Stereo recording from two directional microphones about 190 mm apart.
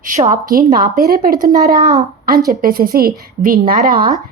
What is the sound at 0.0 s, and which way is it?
A woman's voice, 40° right (ahead or behind).